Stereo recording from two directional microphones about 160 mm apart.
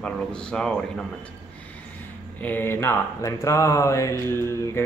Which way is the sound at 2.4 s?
15° left (ahead or behind).